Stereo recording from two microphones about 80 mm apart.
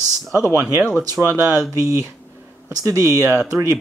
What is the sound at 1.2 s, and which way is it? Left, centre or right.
Speech, right.